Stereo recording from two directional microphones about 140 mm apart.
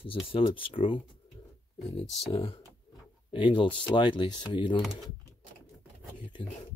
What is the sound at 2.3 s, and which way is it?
Speech, 40° left (ahead or behind).